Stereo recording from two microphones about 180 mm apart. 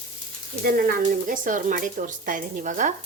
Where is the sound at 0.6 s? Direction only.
55° right (ahead or behind).